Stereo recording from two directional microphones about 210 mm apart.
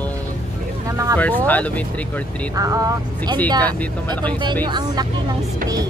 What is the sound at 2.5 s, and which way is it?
Speech, 15° right (ahead or behind).